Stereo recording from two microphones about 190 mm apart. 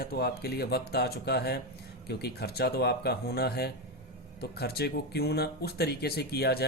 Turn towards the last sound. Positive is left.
turn(degrees=55)  # may be behind; listen again after turning